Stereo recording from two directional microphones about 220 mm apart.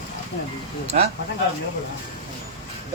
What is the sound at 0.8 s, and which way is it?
Speech, 30° right (ahead or behind).